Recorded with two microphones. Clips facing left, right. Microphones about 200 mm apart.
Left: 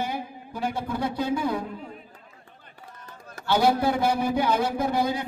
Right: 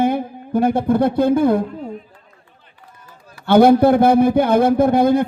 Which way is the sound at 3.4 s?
55° right (ahead or behind).